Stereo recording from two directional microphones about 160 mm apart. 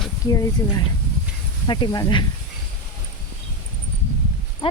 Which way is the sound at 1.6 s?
30° left (ahead or behind).